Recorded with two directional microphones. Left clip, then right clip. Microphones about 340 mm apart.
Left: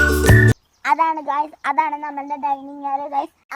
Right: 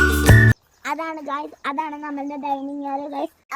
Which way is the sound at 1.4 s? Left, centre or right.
Left.